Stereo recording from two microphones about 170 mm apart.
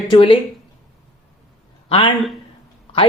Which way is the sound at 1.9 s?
30° left (ahead or behind).